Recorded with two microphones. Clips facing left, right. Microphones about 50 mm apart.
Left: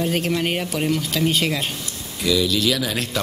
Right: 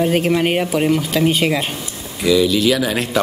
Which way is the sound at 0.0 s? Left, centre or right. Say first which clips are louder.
Right 6 dB; centre.